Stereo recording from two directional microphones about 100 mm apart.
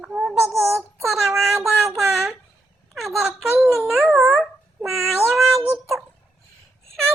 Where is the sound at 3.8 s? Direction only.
20° right (ahead or behind).